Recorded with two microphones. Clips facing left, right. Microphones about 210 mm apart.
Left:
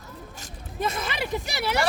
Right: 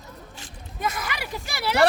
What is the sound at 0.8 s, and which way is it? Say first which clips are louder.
Speech: left 2 dB; 25° left (ahead or behind).